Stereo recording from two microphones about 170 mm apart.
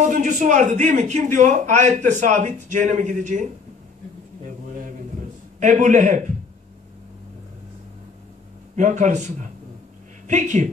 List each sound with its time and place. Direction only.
0.0 s a man's voice: 50° right (ahead or behind)
5.6 s a man's voice: 45° right (ahead or behind)
8.7 s a man's voice: 45° right (ahead or behind)